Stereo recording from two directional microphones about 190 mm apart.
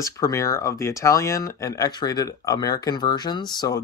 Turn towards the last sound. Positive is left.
turn(degrees=20)  # may be behind; listen again after turning